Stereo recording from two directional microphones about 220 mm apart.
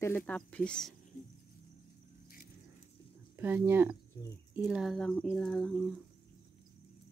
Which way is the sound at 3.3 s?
10° right (ahead or behind).